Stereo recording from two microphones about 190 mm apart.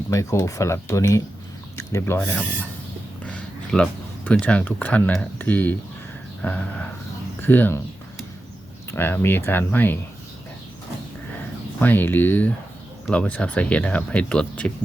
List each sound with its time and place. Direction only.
0.1 s speech: 15° left (ahead or behind)
8.9 s speech: 10° left (ahead or behind)
11.8 s speech: 10° left (ahead or behind)